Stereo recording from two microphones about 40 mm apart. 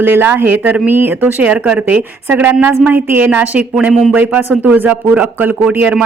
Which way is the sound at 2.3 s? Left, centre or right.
Right.